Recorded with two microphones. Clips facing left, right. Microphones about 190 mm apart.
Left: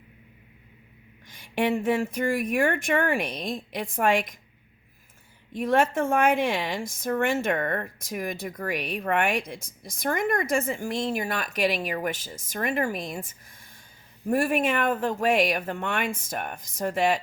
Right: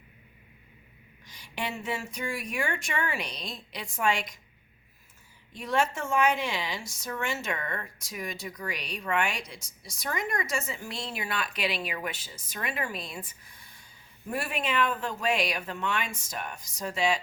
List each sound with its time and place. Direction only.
1.3 s speech: 55° left (ahead or behind)
5.5 s speech: 55° left (ahead or behind)